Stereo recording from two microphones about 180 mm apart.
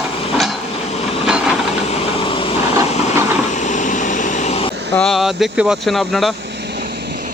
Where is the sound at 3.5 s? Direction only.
45° left (ahead or behind).